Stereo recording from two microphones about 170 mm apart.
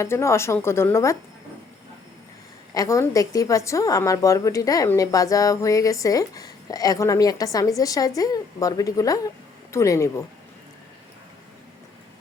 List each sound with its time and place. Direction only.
0.0 s speech: 15° left (ahead or behind)
2.7 s a woman's voice: 20° left (ahead or behind)